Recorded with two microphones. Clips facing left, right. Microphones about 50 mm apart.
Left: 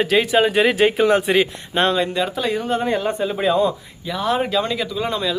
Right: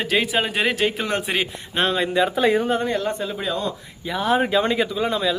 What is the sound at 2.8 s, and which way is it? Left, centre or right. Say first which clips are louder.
Speech: left 3 dB; centre.